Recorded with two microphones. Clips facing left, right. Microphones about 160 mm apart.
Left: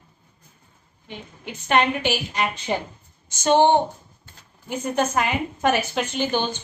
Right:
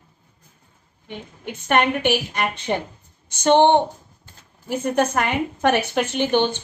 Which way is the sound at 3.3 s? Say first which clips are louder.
Right 3 dB; 60° right (ahead or behind).